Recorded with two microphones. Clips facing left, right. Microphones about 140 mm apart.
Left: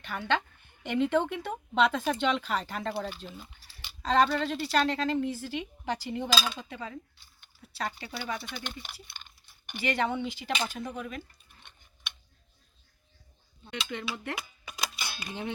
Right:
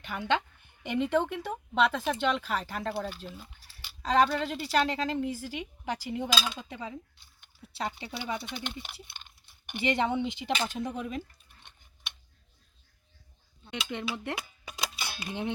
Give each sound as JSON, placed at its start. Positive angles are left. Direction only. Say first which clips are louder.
{"t": 0.0, "sound": "a woman's voice", "louder": "even", "side_deg": -15}
{"t": 13.7, "sound": "speech", "louder": "right 1 dB", "side_deg": -20}